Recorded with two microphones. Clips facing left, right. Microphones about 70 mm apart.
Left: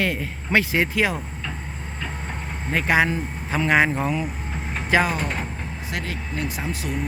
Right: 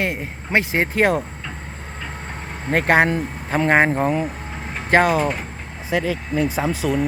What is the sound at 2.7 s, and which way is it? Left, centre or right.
Speech, right.